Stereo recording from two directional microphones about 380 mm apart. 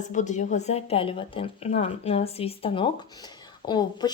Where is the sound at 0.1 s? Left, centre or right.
Centre.